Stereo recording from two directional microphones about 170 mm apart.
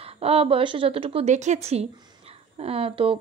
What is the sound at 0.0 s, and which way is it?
A woman's voice, 35° right (ahead or behind).